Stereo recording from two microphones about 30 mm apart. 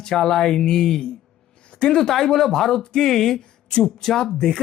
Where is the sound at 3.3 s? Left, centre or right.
Left.